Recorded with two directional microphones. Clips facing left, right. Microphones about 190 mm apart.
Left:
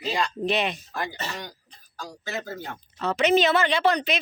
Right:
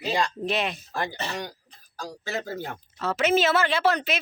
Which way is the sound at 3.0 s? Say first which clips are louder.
Left 2 dB; centre (ahead or behind).